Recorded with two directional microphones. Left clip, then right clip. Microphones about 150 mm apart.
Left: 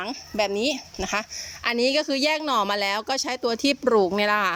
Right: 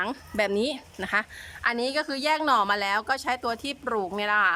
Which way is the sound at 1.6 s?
15° left (ahead or behind).